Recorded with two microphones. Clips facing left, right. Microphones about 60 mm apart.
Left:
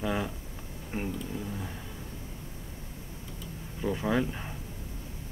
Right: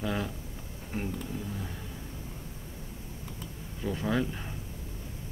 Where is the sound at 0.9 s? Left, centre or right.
Left.